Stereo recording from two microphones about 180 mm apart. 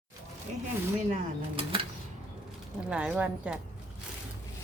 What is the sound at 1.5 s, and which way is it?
Speech, 30° right (ahead or behind).